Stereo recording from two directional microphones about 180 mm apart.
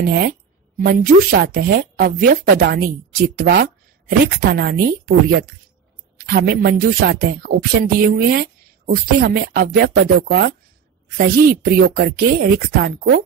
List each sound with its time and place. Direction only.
0.0 s speech: 60° right (ahead or behind)